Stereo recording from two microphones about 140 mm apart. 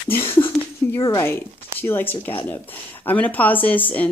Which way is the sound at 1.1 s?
15° left (ahead or behind).